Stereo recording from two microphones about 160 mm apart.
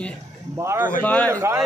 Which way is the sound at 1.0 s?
10° left (ahead or behind).